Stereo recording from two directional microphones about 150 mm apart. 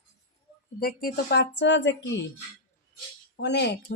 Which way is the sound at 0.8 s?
80° left.